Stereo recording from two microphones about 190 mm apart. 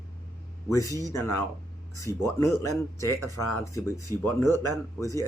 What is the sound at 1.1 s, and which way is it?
Speech, 15° left (ahead or behind).